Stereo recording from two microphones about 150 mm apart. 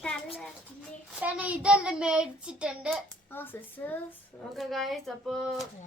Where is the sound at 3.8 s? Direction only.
10° left (ahead or behind).